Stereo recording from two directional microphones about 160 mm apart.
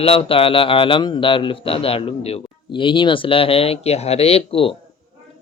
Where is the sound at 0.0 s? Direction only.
35° left (ahead or behind).